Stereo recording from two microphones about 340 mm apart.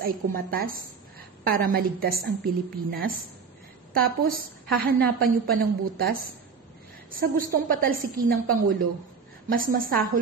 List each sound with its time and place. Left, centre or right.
0.0 s a woman's voice: right
4.2 s a woman's voice: right